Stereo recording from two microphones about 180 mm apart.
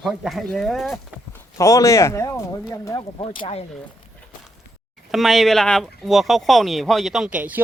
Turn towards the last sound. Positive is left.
turn(degrees=-10)  # may be behind; listen again after turning